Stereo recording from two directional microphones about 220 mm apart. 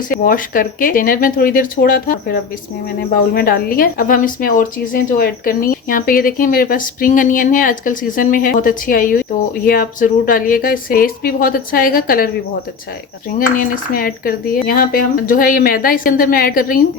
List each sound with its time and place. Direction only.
0.3 s speech: 40° left (ahead or behind)
13.6 s speech: 40° left (ahead or behind)